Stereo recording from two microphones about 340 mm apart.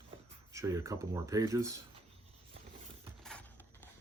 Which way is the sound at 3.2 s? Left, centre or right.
Centre.